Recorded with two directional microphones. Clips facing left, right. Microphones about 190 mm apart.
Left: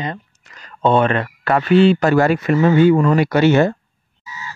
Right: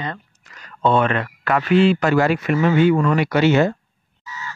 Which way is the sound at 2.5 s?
30° left (ahead or behind).